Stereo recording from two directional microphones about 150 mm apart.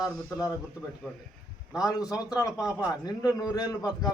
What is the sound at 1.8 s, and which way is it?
Speech, 25° left (ahead or behind).